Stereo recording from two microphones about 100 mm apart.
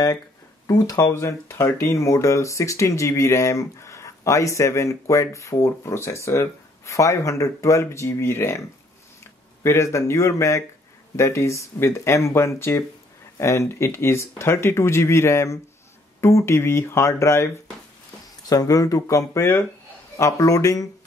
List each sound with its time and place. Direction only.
0.7 s speech: 35° left (ahead or behind)
18.5 s speech: 35° left (ahead or behind)